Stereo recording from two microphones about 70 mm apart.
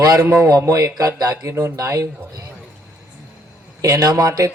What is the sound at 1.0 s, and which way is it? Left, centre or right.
Speech, right.